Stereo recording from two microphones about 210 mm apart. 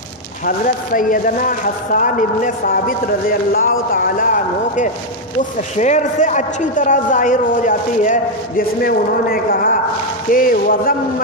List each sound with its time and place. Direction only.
0.5 s a man's voice: 40° left (ahead or behind)